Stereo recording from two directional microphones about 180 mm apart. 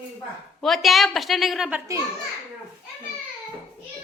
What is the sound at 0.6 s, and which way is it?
A woman's voice, centre (ahead or behind).